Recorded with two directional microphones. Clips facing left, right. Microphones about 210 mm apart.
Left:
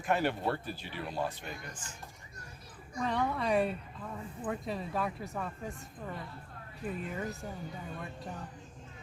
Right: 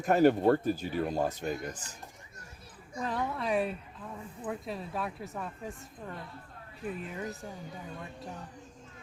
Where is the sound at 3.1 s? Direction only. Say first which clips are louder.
Left 1 dB; centre (ahead or behind).